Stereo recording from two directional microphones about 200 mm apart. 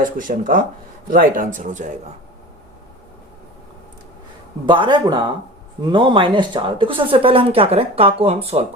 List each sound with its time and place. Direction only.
0.0 s speech: 45° right (ahead or behind)
4.6 s speech: 25° right (ahead or behind)